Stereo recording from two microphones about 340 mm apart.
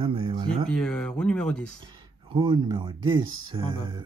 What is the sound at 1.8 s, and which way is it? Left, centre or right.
Speech, centre.